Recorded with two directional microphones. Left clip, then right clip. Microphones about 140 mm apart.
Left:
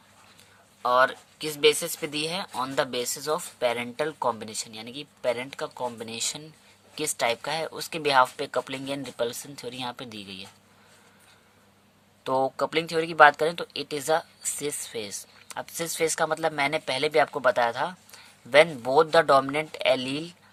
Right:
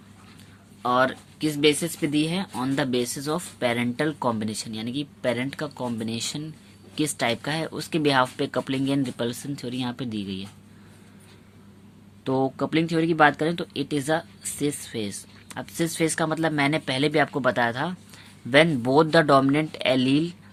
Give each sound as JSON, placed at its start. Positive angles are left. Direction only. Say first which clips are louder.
{"t": 0.8, "sound": "speech", "louder": "even", "side_deg": 30}
{"t": 12.2, "sound": "speech", "louder": "even", "side_deg": 50}